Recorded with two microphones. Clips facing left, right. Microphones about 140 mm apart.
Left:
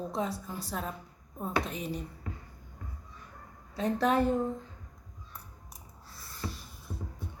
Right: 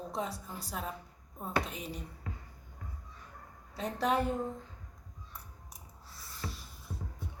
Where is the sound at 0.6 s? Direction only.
5° right (ahead or behind).